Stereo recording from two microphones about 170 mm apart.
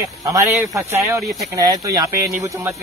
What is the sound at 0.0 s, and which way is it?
Speech, 20° right (ahead or behind).